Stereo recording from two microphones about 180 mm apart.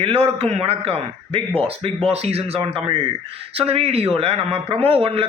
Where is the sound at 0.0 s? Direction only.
35° right (ahead or behind).